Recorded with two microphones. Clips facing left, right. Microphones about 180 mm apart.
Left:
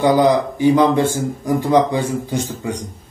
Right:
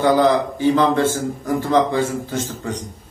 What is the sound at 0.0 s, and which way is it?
A man's voice, 15° left (ahead or behind).